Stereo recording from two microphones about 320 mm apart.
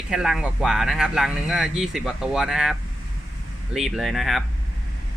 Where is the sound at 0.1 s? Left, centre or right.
Centre.